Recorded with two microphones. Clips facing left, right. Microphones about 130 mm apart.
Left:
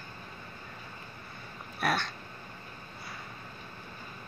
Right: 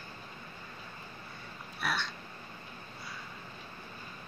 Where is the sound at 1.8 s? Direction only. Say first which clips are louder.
Left 5 dB; 50° left (ahead or behind).